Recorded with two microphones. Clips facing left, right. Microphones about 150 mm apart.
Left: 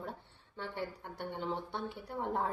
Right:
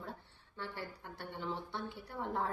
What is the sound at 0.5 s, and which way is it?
A woman's voice, 20° left (ahead or behind).